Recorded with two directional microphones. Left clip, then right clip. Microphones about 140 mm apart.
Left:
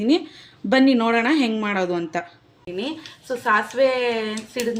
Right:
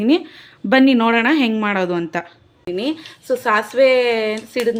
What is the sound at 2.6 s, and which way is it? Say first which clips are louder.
Speech: right 6 dB; 70° right (ahead or behind).